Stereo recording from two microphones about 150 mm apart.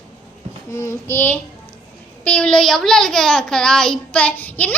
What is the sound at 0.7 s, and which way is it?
A child's voice, 20° left (ahead or behind).